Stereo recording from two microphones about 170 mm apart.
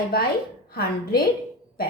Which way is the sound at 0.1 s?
60° left (ahead or behind).